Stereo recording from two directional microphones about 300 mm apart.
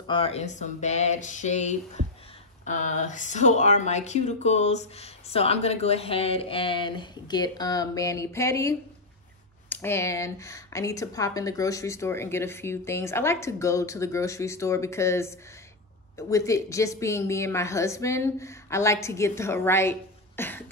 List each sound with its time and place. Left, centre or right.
0.1 s a woman's voice: centre